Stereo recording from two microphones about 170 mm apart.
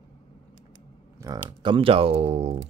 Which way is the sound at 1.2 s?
25° right (ahead or behind).